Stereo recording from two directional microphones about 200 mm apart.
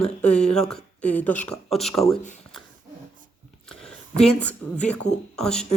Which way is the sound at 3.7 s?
5° left (ahead or behind).